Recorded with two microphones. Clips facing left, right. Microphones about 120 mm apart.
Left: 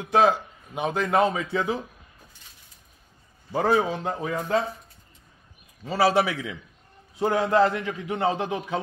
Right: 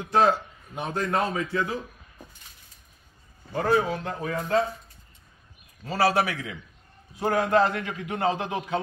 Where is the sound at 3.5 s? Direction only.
20° left (ahead or behind).